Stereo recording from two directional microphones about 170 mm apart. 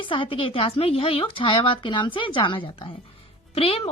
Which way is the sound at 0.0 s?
30° left (ahead or behind).